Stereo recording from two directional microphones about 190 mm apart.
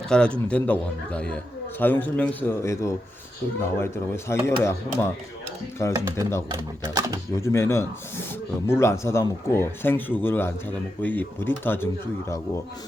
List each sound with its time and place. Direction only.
0.1 s a man's voice: 5° left (ahead or behind)
6.5 s speech: 20° right (ahead or behind)
7.3 s speech: 15° left (ahead or behind)